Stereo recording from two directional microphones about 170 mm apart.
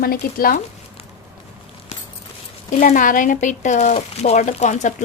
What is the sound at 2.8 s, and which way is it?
Speech, 50° left (ahead or behind).